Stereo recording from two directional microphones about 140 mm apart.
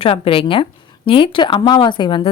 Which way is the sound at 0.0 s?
40° left (ahead or behind).